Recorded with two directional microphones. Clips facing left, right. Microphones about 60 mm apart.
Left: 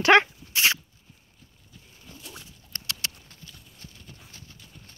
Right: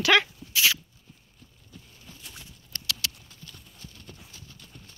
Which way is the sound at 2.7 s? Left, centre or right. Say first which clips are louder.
Right 1 dB; left.